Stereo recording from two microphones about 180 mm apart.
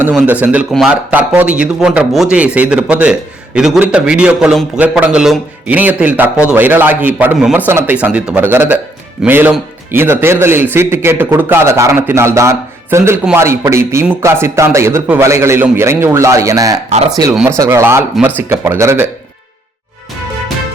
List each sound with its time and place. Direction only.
0.1 s a man's voice: 5° right (ahead or behind)